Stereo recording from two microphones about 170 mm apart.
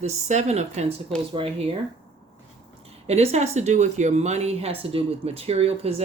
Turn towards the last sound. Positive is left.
turn(degrees=-35)  # may be behind; listen again after turning